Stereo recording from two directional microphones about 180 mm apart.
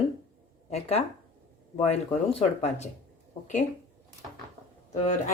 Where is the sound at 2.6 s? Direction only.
40° left (ahead or behind).